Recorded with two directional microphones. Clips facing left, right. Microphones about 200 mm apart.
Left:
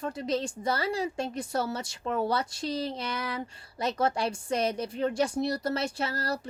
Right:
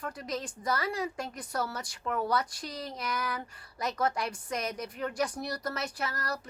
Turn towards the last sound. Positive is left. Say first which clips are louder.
# left 4 dB
turn(degrees=30)  # may be behind; listen again after turning